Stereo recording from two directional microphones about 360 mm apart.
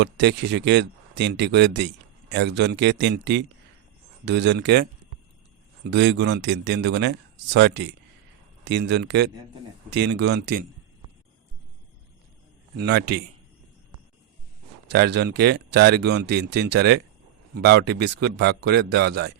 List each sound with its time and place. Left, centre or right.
0.0 s speech: right
12.7 s speech: right
14.9 s speech: right